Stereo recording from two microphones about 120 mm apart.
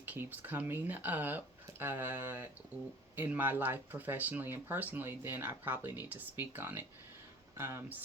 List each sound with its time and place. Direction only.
0.0 s speech: 15° right (ahead or behind)